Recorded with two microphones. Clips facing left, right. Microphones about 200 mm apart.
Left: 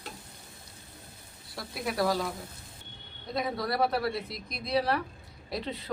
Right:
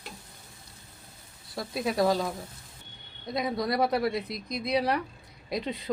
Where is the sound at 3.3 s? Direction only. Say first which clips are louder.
Right 2 dB; 15° right (ahead or behind).